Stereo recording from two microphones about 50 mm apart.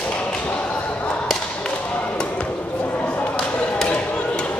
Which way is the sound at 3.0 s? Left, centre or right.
Left.